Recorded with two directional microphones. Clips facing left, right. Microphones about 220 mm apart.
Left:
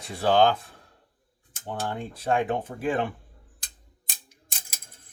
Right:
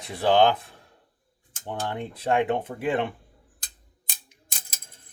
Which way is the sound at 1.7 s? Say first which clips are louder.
Right 1 dB; 20° right (ahead or behind).